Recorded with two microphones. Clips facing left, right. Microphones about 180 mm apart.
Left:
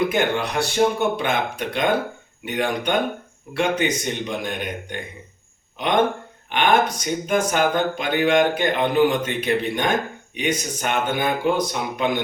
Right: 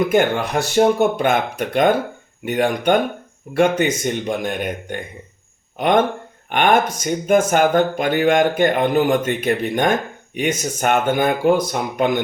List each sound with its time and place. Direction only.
0.1 s speech: 45° right (ahead or behind)
6.5 s speech: 50° right (ahead or behind)